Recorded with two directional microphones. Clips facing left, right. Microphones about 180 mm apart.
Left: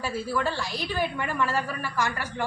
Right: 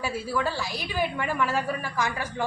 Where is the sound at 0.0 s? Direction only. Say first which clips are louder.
Even; 10° right (ahead or behind).